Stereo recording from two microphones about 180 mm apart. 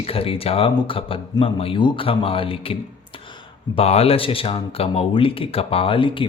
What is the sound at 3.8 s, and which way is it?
Speech, 35° left (ahead or behind).